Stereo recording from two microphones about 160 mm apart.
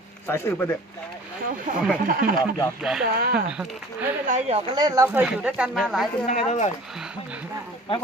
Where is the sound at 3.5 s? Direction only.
5° right (ahead or behind).